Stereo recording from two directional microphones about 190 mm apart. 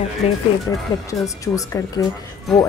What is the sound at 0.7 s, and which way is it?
Speech, 15° left (ahead or behind).